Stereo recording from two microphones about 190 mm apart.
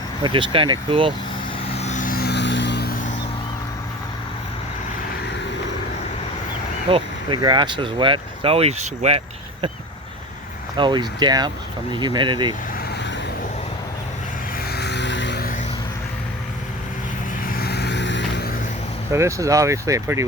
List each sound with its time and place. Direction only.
0.2 s speech: 25° right (ahead or behind)
1.6 s vehicle: 35° left (ahead or behind); by 2.9 s 60° left (ahead or behind)
6.9 s speech: 25° right (ahead or behind)
10.8 s speech: 25° right (ahead or behind)
14.7 s vehicle: 60° left (ahead or behind)
17.4 s vehicle: 50° left (ahead or behind)
19.1 s speech: 15° right (ahead or behind)